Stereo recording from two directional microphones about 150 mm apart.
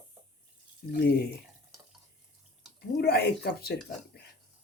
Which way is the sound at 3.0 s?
90° left.